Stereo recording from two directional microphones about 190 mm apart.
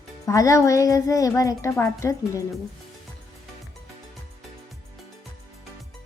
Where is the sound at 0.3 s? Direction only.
15° left (ahead or behind).